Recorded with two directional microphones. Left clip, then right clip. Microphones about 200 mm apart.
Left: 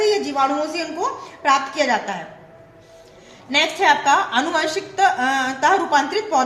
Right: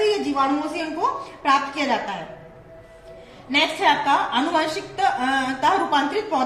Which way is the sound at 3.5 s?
35° left (ahead or behind).